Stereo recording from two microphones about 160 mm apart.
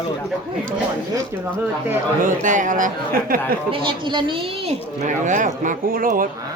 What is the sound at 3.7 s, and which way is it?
A woman's voice, 30° right (ahead or behind).